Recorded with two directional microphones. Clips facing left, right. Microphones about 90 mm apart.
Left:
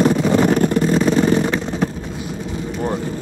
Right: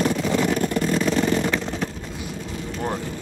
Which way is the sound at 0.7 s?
30° left (ahead or behind).